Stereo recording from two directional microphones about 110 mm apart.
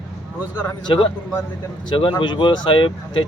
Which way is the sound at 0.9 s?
45° left (ahead or behind).